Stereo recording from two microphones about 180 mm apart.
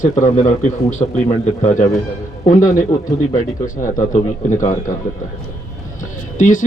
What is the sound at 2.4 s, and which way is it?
Speech, 45° left (ahead or behind).